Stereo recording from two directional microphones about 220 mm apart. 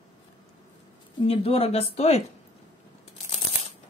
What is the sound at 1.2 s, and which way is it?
Speech, 25° left (ahead or behind).